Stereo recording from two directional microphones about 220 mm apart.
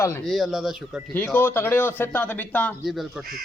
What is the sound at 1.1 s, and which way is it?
A man's voice, 10° left (ahead or behind).